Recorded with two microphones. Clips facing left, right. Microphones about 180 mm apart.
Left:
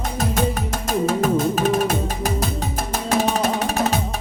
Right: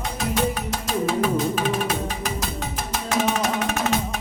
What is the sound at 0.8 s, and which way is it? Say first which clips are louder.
Music: left 3 dB; 45° left (ahead or behind).